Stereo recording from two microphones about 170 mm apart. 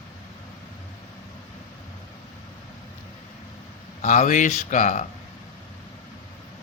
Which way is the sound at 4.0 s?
50° left (ahead or behind).